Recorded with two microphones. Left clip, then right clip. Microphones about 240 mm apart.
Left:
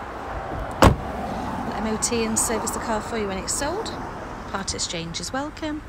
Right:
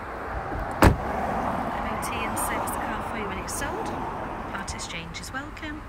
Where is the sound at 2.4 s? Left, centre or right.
Right.